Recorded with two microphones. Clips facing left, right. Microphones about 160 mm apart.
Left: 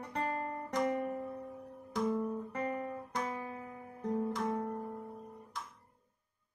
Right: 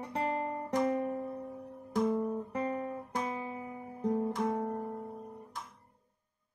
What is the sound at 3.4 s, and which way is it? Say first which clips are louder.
Music: right 3 dB; 10° right (ahead or behind).